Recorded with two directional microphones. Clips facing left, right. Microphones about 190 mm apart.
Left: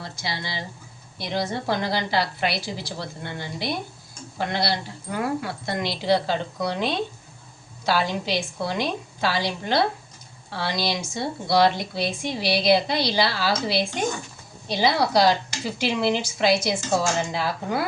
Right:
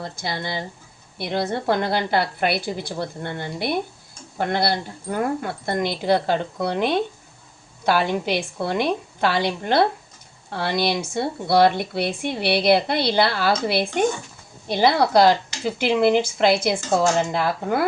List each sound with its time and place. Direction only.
0.0 s speech: 50° right (ahead or behind)